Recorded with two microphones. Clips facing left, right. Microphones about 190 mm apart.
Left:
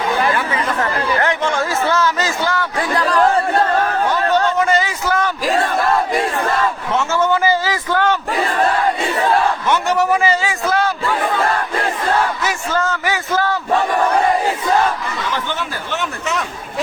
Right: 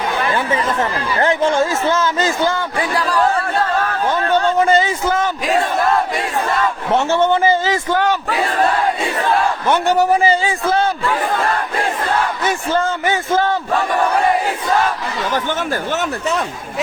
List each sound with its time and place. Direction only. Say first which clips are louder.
1.2 s speech: right 3 dB; 30° right (ahead or behind)
4.3 s a man's voice: right 4 dB; 30° right (ahead or behind)
6.9 s speech: right 3 dB; 35° right (ahead or behind); by 8.1 s 20° right (ahead or behind)
9.6 s a man's voice: right 2 dB; 30° right (ahead or behind)
12.4 s speech: right 2 dB; 30° right (ahead or behind)
15.3 s speech: right 6 dB; 45° right (ahead or behind)